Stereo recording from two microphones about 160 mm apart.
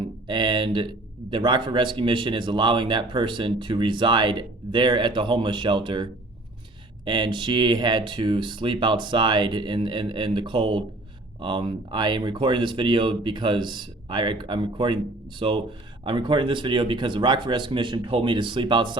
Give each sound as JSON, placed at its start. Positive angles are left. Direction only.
{"t": 0.0, "sound": "speech", "side_deg": -30}